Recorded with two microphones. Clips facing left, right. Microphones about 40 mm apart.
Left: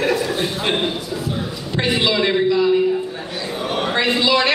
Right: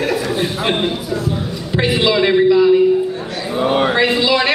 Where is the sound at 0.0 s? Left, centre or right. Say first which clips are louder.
Right 1 dB; centre.